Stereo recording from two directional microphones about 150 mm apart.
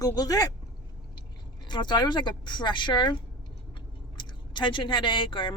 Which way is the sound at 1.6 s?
30° left (ahead or behind).